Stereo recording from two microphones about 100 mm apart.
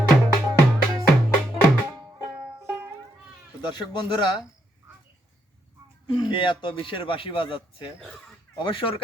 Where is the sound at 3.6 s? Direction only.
50° left (ahead or behind).